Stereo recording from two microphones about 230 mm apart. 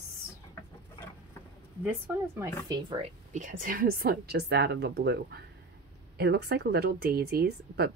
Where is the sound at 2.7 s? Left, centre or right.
Centre.